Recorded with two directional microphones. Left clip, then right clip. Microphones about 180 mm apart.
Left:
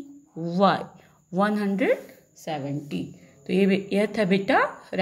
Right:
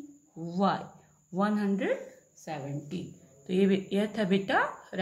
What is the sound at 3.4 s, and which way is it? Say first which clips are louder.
A woman's voice: left 4 dB; 30° left (ahead or behind).